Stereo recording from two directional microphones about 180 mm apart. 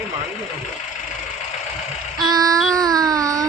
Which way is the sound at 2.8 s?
20° right (ahead or behind).